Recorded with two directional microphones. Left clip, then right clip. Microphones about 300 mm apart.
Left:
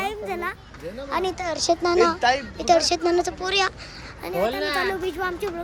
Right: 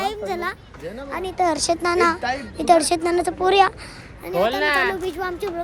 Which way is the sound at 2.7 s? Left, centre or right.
Centre.